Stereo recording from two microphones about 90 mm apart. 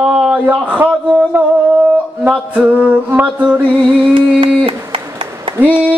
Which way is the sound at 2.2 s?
15° right (ahead or behind).